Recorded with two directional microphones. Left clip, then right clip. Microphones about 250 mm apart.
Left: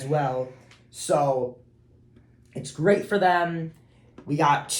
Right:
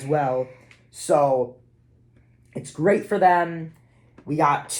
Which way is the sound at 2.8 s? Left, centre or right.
Right.